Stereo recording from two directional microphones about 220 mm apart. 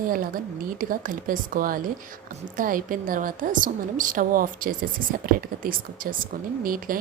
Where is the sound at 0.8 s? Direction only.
40° right (ahead or behind).